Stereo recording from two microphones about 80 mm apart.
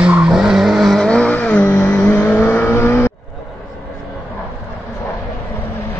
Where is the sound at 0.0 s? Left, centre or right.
Centre.